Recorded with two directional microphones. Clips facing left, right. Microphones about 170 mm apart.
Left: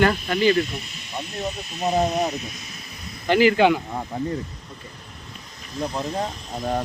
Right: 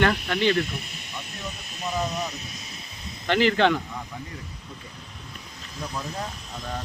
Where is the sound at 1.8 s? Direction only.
45° left (ahead or behind).